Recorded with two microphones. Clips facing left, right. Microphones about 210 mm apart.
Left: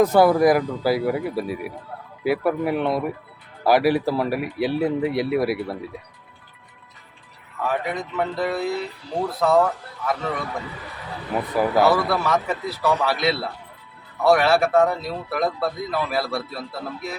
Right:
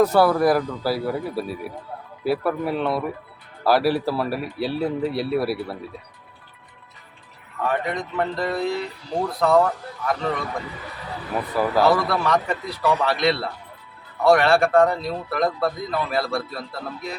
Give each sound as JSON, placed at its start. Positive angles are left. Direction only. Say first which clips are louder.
{"t": 0.0, "sound": "speech", "louder": "left 2 dB", "side_deg": 15}
{"t": 7.6, "sound": "a man's voice", "louder": "right 1 dB", "side_deg": 5}
{"t": 11.8, "sound": "a man's voice", "louder": "even", "side_deg": 5}